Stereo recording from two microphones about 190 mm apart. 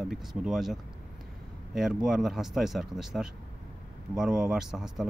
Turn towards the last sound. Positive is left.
turn(degrees=0)  # may be behind; listen again after turning